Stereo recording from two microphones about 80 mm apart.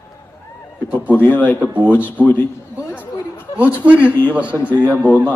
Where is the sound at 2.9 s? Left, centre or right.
Left.